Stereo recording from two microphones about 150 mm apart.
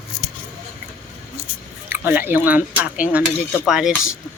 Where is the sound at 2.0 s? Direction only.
15° right (ahead or behind).